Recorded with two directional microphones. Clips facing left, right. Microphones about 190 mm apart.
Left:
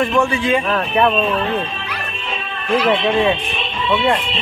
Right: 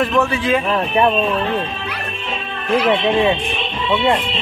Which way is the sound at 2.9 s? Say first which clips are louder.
Even; 20° right (ahead or behind).